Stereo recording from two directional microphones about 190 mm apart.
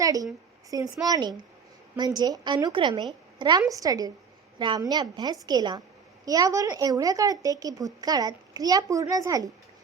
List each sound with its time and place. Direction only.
0.0 s a woman's voice: 20° right (ahead or behind)